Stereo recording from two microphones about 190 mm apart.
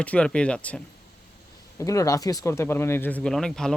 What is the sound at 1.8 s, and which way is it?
Speech, 15° left (ahead or behind).